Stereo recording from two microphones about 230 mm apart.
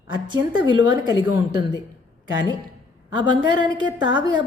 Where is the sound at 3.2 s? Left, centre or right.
Centre.